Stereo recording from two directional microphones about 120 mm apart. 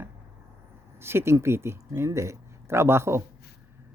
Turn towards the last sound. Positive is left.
turn(degrees=-20)  # may be behind; listen again after turning